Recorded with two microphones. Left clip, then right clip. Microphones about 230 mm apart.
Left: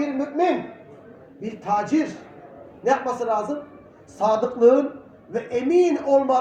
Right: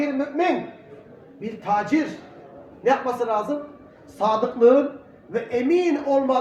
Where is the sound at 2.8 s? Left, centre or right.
Right.